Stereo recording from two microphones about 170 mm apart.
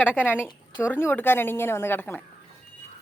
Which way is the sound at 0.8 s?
10° left (ahead or behind).